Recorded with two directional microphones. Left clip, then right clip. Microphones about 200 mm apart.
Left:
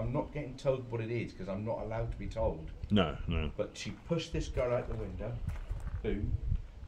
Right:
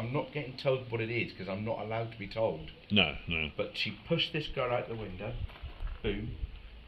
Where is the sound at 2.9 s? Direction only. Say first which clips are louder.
Right 4 dB; 35° left (ahead or behind).